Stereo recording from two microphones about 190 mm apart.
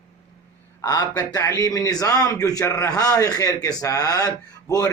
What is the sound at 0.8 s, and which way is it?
A man's voice, 20° left (ahead or behind).